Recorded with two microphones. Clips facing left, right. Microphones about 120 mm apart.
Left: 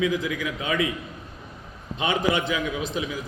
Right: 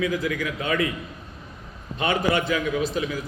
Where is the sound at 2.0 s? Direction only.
15° left (ahead or behind).